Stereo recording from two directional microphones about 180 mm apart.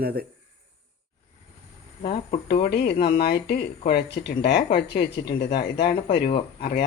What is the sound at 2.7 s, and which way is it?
Speech, 60° left (ahead or behind).